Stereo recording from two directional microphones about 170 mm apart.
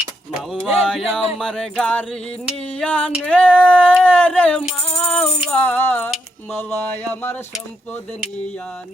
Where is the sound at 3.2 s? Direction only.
10° left (ahead or behind).